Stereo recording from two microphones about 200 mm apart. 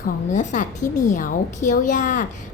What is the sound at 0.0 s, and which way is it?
A woman's voice, 40° left (ahead or behind).